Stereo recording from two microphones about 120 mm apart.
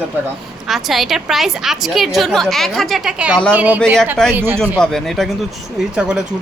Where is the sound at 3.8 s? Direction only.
5° left (ahead or behind).